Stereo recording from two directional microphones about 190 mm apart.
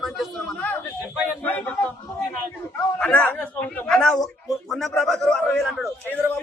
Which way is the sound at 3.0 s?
10° left (ahead or behind).